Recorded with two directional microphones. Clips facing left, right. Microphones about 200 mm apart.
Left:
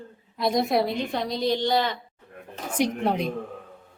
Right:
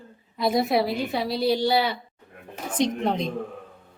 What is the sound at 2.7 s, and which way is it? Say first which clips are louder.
Speech: even; 10° left (ahead or behind).